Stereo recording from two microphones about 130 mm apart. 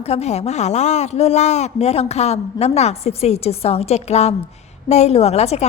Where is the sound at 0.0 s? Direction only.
55° left (ahead or behind).